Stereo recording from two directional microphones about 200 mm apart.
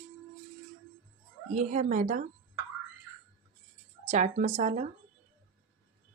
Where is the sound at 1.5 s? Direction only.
35° right (ahead or behind).